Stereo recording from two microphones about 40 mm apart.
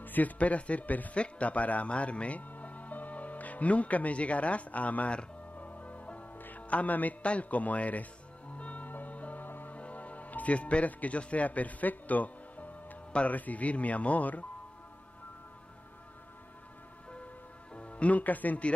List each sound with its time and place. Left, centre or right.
0.0 s speech: left
5.6 s music: left
6.3 s music: left
6.7 s speech: left
8.5 s music: left
9.8 s a man's voice: left
17.7 s speech: left